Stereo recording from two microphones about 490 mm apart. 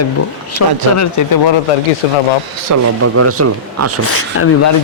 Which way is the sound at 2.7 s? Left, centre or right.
Right.